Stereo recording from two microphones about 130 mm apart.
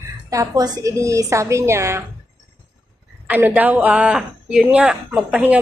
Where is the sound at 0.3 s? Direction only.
25° right (ahead or behind).